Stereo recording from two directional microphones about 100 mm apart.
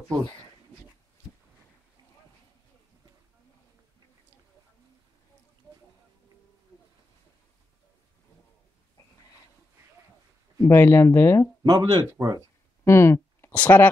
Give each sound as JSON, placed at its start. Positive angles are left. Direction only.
{"t": 10.6, "sound": "speech", "side_deg": 20}
{"t": 11.6, "sound": "speech", "side_deg": -40}
{"t": 12.4, "sound": "a sound", "side_deg": 25}